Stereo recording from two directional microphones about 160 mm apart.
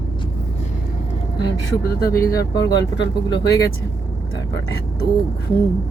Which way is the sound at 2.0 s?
65° left (ahead or behind).